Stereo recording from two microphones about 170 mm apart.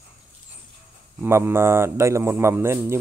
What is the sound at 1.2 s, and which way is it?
Speech, 15° right (ahead or behind).